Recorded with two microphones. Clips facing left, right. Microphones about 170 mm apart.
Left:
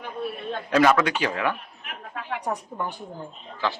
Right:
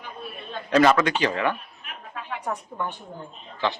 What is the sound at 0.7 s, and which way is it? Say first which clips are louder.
Speech: right 1 dB; 5° left (ahead or behind).